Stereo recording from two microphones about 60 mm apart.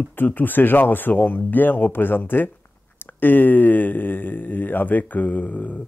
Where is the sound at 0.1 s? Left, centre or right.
Left.